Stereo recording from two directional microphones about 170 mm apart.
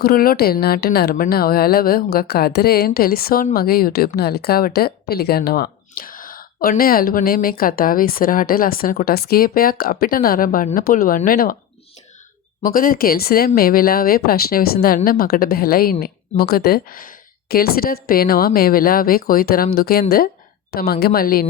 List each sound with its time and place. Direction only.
0.0 s a woman's voice: 60° left (ahead or behind)
12.6 s a woman's voice: 55° left (ahead or behind)